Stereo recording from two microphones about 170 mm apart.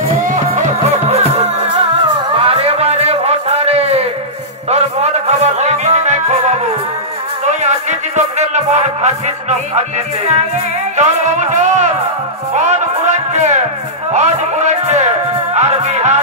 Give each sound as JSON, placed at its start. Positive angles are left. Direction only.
{"t": 0.5, "sound": "music", "side_deg": -40}
{"t": 11.0, "sound": "a man's voice", "side_deg": -45}
{"t": 12.5, "sound": "music", "side_deg": -45}
{"t": 14.1, "sound": "a man's voice", "side_deg": -45}
{"t": 15.5, "sound": "music", "side_deg": -40}